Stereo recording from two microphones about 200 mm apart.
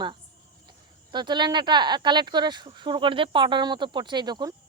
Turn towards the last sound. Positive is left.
turn(degrees=-20)  # may be behind; listen again after turning